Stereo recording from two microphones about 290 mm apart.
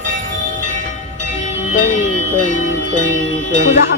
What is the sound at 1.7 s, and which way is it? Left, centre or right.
Bell, left.